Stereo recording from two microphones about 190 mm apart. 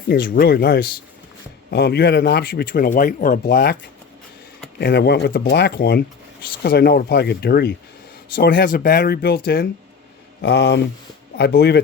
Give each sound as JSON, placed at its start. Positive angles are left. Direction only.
{"t": 0.1, "sound": "speech", "side_deg": 55}
{"t": 4.8, "sound": "speech", "side_deg": 60}